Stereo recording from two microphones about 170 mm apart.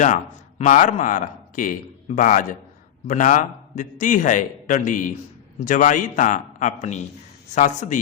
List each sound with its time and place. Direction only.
0.6 s a man's voice: 45° left (ahead or behind)